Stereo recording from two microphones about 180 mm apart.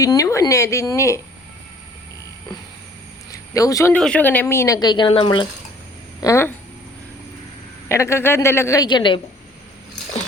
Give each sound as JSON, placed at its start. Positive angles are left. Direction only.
{"t": 0.0, "sound": "speech", "side_deg": 20}
{"t": 3.3, "sound": "speech", "side_deg": 20}
{"t": 3.9, "sound": "speech", "side_deg": 5}
{"t": 6.1, "sound": "speech", "side_deg": 15}
{"t": 7.9, "sound": "speech", "side_deg": 15}